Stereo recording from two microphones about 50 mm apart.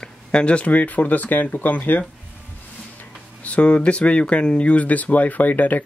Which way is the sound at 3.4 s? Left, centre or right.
Left.